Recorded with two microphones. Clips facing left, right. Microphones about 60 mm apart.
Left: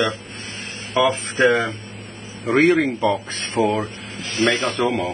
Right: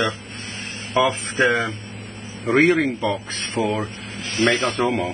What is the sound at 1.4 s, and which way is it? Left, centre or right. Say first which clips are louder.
Speech: left 5 dB; centre.